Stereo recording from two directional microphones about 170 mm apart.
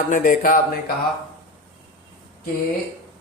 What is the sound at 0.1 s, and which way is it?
Speech, 50° left (ahead or behind).